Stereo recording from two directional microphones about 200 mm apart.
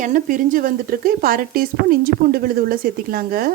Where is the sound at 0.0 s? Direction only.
40° right (ahead or behind).